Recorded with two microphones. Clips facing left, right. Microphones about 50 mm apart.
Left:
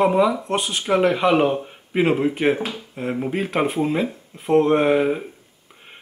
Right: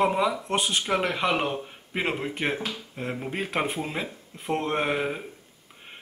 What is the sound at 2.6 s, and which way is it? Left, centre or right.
Speech, centre.